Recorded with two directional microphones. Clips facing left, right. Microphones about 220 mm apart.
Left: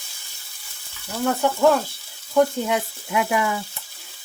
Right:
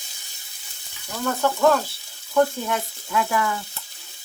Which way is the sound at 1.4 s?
15° left (ahead or behind).